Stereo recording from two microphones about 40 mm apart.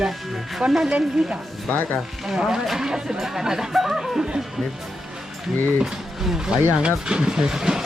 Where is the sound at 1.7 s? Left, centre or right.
Left.